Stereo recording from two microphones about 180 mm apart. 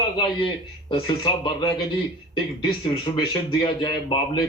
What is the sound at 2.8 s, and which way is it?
Speech, 25° left (ahead or behind).